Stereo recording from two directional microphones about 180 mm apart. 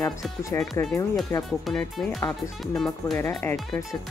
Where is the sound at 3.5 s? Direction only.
Centre (ahead or behind).